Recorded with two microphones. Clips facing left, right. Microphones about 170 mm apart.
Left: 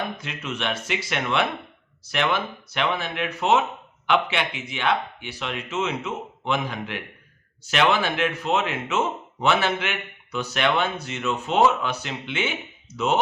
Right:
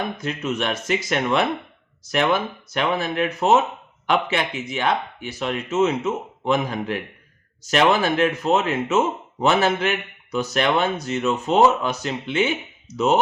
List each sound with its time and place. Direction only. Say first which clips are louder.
0.2 s a man's voice: right 6 dB; 40° right (ahead or behind)